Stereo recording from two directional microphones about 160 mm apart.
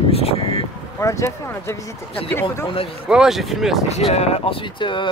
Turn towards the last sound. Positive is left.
turn(degrees=30)  # may be behind; listen again after turning